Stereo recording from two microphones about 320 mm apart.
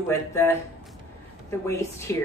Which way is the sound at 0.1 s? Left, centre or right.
Centre.